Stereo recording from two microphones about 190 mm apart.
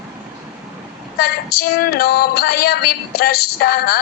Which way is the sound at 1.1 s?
55° left (ahead or behind).